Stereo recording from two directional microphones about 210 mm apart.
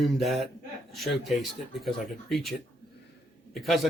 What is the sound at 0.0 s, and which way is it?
A man's voice, centre (ahead or behind).